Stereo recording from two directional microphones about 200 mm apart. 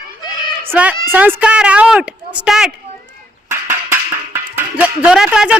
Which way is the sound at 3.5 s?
10° right (ahead or behind).